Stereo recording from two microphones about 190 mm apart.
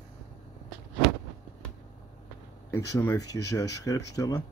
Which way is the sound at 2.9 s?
15° left (ahead or behind).